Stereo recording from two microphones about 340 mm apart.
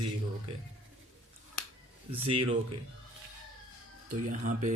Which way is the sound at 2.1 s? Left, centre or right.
Centre.